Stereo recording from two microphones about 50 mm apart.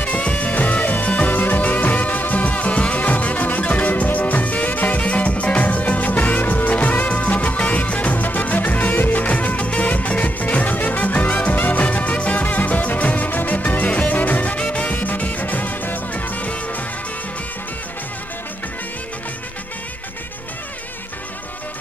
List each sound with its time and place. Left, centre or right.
0.0 s music: left